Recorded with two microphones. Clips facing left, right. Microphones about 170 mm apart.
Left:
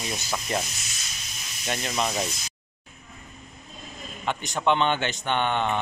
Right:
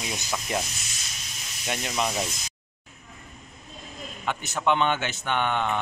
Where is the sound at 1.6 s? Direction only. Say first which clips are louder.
Left 1 dB; 5° right (ahead or behind).